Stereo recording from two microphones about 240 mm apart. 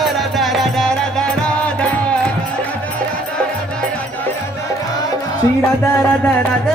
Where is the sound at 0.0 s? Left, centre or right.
Centre.